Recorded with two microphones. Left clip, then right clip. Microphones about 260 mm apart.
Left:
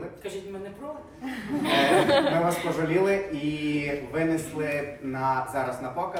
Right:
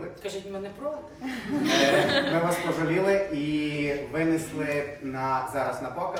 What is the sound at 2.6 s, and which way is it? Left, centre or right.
Speech, centre.